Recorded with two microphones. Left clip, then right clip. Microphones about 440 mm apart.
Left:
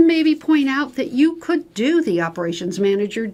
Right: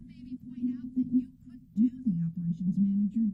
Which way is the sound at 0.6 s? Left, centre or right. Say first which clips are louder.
Left 13 dB; left.